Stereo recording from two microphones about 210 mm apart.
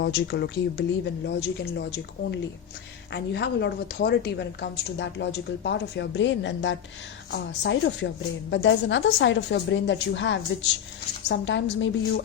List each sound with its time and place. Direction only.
0.0 s speech: 50° left (ahead or behind)
3.1 s a woman's voice: 55° left (ahead or behind)